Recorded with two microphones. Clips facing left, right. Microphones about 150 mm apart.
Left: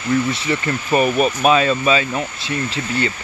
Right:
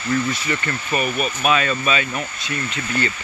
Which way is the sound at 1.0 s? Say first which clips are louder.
Left 5 dB; 35° left (ahead or behind).